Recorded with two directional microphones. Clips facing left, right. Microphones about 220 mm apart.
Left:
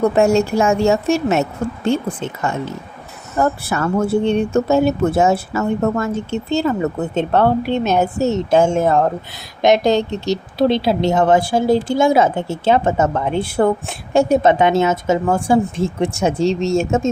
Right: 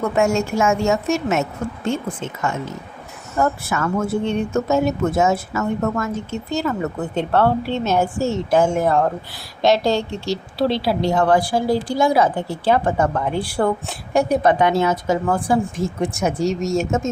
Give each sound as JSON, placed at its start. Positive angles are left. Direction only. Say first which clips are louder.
{"t": 0.0, "sound": "a woman's voice", "louder": "left 5 dB", "side_deg": 35}